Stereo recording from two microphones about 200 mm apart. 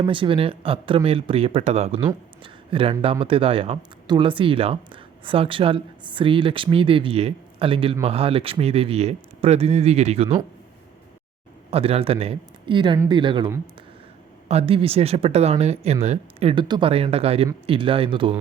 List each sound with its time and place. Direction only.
0.0 s speech: 25° right (ahead or behind)
11.7 s speech: 30° right (ahead or behind)